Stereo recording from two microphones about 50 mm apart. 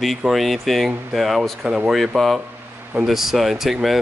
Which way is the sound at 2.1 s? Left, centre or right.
Centre.